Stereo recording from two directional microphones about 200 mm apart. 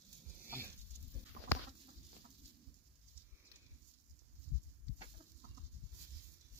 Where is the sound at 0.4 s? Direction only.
10° right (ahead or behind).